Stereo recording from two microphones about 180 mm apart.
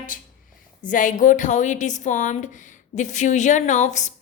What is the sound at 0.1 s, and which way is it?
A woman's voice, 50° left (ahead or behind).